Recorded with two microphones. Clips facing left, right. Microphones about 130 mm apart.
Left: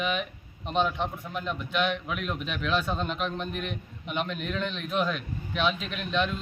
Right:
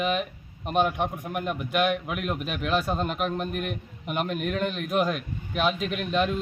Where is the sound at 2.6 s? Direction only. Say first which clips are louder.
Right 2 dB; 45° right (ahead or behind).